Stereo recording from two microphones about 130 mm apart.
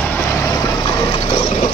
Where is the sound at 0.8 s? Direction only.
35° left (ahead or behind).